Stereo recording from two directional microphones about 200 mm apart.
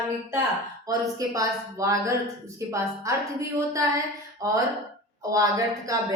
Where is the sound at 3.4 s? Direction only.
15° right (ahead or behind).